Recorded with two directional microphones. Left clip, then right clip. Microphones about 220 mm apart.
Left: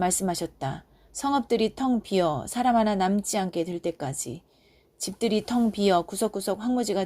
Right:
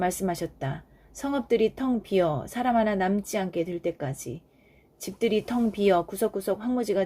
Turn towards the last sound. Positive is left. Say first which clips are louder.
# even
turn(degrees=20)  # may be behind; listen again after turning